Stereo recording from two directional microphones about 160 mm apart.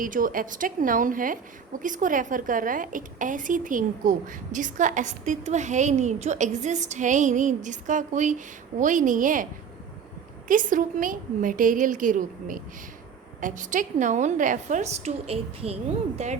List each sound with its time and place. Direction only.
0.0 s a woman's voice: 60° right (ahead or behind)
10.5 s a woman's voice: 55° right (ahead or behind)